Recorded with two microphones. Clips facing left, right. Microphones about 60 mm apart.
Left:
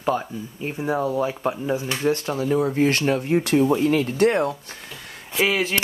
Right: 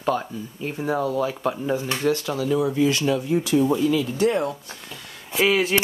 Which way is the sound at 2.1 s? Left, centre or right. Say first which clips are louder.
Left 1 dB; left.